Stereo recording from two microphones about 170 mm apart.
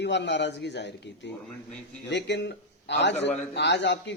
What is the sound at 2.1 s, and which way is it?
A man's voice, 90° left.